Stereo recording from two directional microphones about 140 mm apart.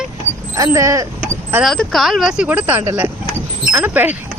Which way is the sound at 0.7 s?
25° right (ahead or behind).